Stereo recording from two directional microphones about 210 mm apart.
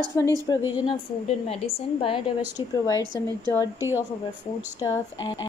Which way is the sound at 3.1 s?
15° left (ahead or behind).